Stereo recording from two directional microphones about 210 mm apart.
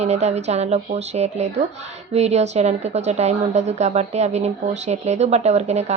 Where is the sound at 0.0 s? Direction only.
30° right (ahead or behind).